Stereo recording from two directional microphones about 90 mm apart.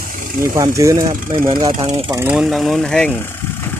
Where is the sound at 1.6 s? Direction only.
90° right.